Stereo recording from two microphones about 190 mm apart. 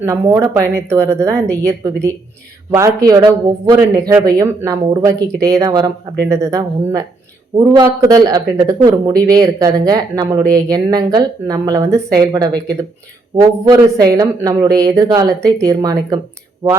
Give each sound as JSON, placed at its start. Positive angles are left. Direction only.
{"t": 0.0, "sound": "a man's voice", "side_deg": -15}